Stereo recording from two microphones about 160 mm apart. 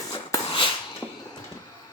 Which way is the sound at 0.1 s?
30° left (ahead or behind).